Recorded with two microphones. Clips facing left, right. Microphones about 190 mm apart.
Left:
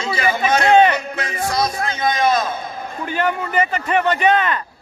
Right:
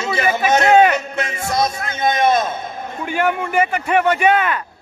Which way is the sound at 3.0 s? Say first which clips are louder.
Right 2 dB; 10° right (ahead or behind).